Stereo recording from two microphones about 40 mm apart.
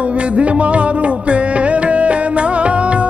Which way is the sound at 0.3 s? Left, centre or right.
Right.